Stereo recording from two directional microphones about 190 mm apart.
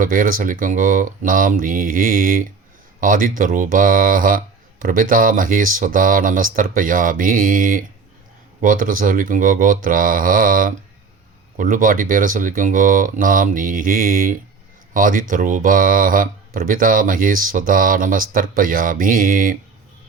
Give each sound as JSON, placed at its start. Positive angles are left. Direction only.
{"t": 0.0, "sound": "speech", "side_deg": -45}